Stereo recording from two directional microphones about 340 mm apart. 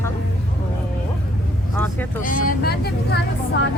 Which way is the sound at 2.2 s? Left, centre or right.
Left.